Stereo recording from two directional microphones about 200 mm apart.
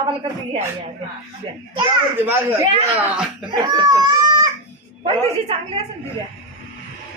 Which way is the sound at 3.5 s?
20° right (ahead or behind).